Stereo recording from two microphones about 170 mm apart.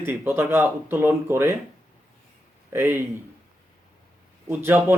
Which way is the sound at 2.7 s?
15° right (ahead or behind).